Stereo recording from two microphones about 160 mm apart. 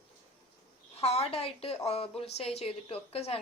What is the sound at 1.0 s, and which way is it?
A woman's voice, 40° left (ahead or behind).